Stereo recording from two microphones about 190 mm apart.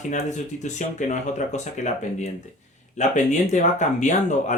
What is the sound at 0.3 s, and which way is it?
Speech, 40° left (ahead or behind).